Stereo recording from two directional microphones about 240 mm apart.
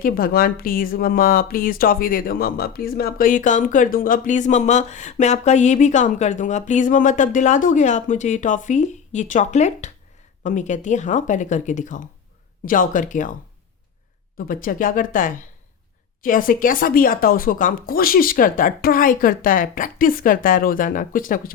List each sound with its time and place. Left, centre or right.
0.0 s speech: left
14.3 s speech: left